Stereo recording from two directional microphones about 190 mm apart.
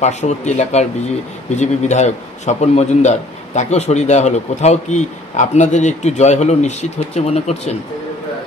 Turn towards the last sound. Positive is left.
turn(degrees=35)  # may be behind; listen again after turning